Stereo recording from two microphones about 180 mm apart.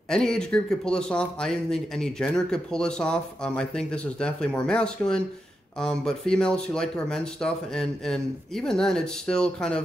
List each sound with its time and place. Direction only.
0.1 s speech: 5° left (ahead or behind)